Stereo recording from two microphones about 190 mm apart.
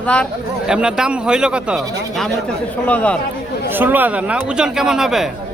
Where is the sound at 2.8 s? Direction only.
5° left (ahead or behind).